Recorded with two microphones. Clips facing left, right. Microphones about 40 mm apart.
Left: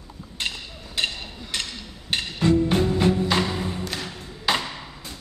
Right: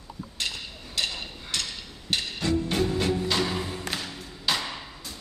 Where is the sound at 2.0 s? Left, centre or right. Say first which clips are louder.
Left 6 dB; left.